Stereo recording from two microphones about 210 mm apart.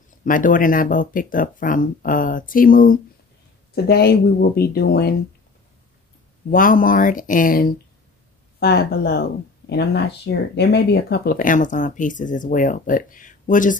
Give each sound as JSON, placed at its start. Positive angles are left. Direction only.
{"t": 0.2, "sound": "speech", "side_deg": 40}
{"t": 6.5, "sound": "speech", "side_deg": 40}